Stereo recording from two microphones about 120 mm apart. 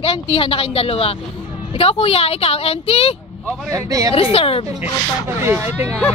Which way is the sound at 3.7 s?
30° right (ahead or behind).